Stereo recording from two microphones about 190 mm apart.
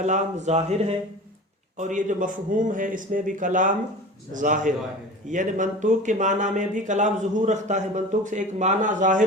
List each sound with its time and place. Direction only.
0.0 s a man's voice: 40° right (ahead or behind)